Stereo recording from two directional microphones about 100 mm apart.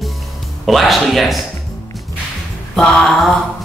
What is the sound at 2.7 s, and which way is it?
Speech, 5° left (ahead or behind).